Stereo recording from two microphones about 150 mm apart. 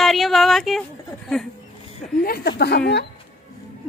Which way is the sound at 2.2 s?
80° left.